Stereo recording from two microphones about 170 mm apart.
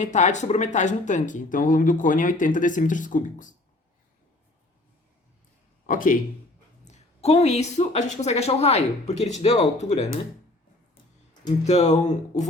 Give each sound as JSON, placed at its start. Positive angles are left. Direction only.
{"t": 0.0, "sound": "speech", "side_deg": 45}
{"t": 5.8, "sound": "a man's voice", "side_deg": 50}
{"t": 6.8, "sound": "speech", "side_deg": 40}
{"t": 11.6, "sound": "speech", "side_deg": 40}